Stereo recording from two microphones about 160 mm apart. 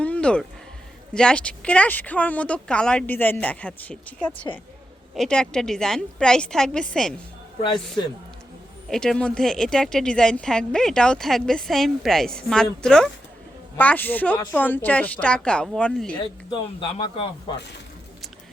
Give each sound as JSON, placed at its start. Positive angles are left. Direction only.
{"t": 0.0, "sound": "a sound", "side_deg": 5}
{"t": 1.1, "sound": "speech", "side_deg": 5}
{"t": 8.9, "sound": "speech", "side_deg": 5}
{"t": 16.1, "sound": "speech", "side_deg": 30}